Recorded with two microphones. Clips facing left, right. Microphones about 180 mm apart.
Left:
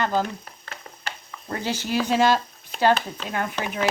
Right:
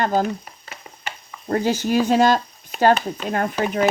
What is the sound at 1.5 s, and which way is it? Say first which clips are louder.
Speech: right 7 dB; 45° right (ahead or behind).